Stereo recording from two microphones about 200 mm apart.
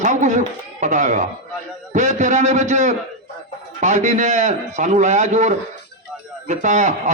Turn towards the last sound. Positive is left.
turn(degrees=-35)  # may be behind; listen again after turning